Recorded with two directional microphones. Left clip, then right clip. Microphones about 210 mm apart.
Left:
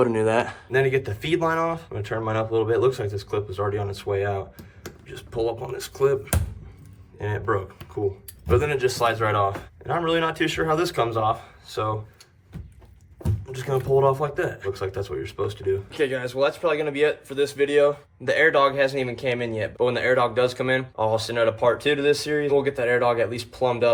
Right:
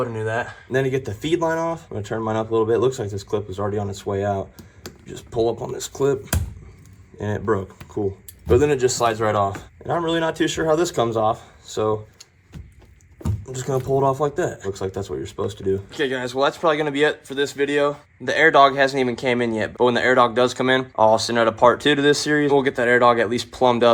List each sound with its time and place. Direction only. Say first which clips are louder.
0.0 s speech: left 4 dB; 40° left (ahead or behind)
0.7 s speech: even; 20° right (ahead or behind)
7.2 s speech: right 3 dB; 30° right (ahead or behind)
13.2 s a sound: right 2 dB; 30° right (ahead or behind)
13.8 s speech: even; 30° right (ahead or behind)